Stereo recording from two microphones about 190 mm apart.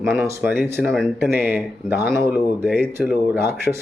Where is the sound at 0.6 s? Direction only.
Centre (ahead or behind).